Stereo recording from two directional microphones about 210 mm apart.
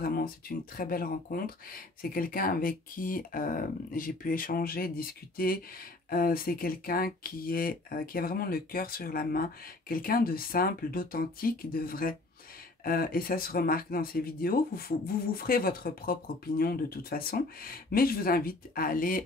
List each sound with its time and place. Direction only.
0.0 s speech: 45° left (ahead or behind)